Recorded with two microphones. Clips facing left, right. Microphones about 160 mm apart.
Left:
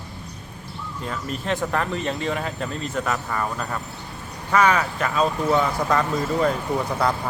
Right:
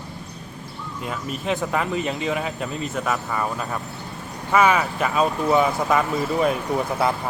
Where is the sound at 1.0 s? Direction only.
5° right (ahead or behind).